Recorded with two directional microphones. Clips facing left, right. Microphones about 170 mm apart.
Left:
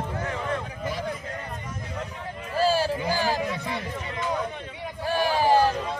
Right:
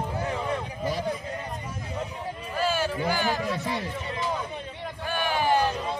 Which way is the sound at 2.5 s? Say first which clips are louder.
Left 4 dB; 35° left (ahead or behind).